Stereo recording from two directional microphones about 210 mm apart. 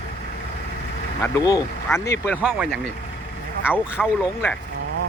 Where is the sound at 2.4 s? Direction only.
5° right (ahead or behind).